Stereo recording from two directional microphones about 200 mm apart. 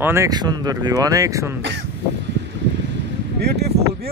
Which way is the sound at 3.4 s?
55° right (ahead or behind).